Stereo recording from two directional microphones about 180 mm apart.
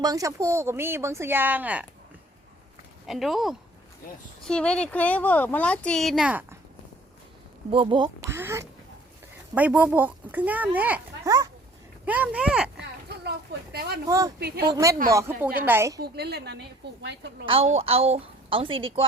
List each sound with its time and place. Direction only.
0.0 s speech: 20° right (ahead or behind)
3.1 s speech: centre (ahead or behind)
7.7 s speech: 30° right (ahead or behind); by 11.0 s 10° right (ahead or behind)
11.3 s speech: 20° right (ahead or behind)
12.0 s speech: 10° right (ahead or behind)
13.7 s speech: 60° right (ahead or behind)
14.1 s speech: 20° right (ahead or behind)
14.3 s speech: 60° right (ahead or behind)
14.7 s speech: 15° right (ahead or behind)
16.0 s speech: 65° right (ahead or behind)
17.4 s a woman's voice: 30° right (ahead or behind)